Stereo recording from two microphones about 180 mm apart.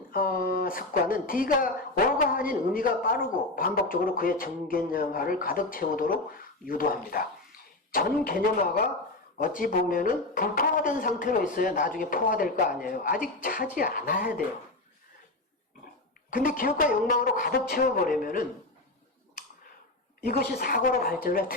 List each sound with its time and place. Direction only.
0.1 s a woman's voice: 55° left (ahead or behind)
16.3 s a woman's voice: 50° left (ahead or behind)
20.4 s a woman's voice: 55° left (ahead or behind)